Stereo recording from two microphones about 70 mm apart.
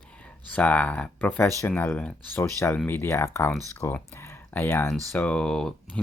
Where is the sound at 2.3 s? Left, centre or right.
Left.